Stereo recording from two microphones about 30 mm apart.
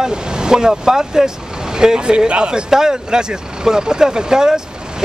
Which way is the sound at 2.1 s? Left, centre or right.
Right.